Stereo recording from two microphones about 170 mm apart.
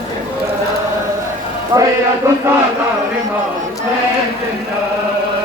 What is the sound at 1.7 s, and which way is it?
Speech, 20° right (ahead or behind).